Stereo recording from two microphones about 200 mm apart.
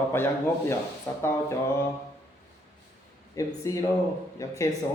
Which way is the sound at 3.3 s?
15° left (ahead or behind).